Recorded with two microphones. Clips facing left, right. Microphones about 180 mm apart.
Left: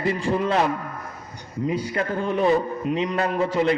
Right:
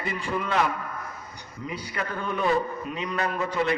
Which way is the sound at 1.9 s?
25° left (ahead or behind).